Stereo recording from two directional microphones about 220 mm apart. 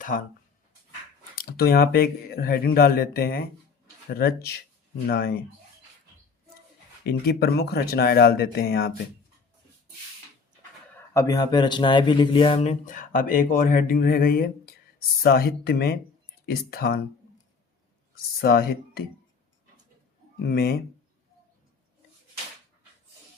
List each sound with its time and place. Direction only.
0.1 s speech: 40° left (ahead or behind)
1.4 s speech: 45° left (ahead or behind)
7.0 s speech: 45° left (ahead or behind)
10.9 s speech: 15° left (ahead or behind); by 19.0 s 45° left (ahead or behind)
20.5 s speech: 45° left (ahead or behind)